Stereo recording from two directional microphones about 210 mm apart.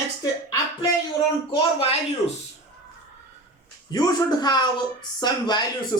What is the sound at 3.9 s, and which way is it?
Speech, 20° left (ahead or behind).